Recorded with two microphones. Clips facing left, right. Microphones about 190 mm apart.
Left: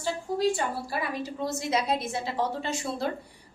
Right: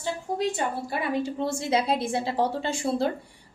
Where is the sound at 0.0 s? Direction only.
20° right (ahead or behind).